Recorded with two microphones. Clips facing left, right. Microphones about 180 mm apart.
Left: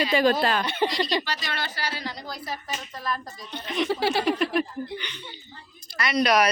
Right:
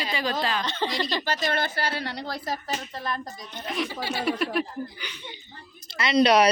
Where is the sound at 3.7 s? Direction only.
Centre (ahead or behind).